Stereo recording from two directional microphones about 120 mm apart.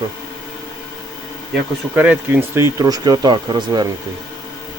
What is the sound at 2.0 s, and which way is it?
Speech, 15° right (ahead or behind).